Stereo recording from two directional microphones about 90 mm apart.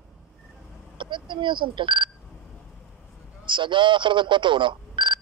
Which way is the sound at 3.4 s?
60° right (ahead or behind).